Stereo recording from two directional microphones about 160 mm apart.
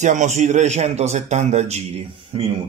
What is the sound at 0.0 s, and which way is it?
A man's voice, 50° right (ahead or behind).